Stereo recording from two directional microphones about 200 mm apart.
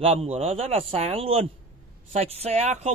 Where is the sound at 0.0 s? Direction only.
30° right (ahead or behind).